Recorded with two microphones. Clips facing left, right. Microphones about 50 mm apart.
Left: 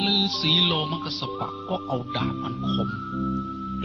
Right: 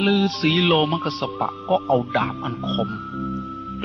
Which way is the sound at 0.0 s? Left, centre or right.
Right.